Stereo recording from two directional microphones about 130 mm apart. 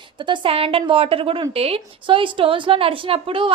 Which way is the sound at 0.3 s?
45° right (ahead or behind).